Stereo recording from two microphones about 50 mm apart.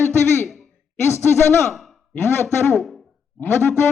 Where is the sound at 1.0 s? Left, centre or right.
Left.